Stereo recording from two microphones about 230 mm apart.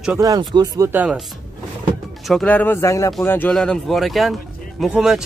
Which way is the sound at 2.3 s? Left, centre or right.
Centre.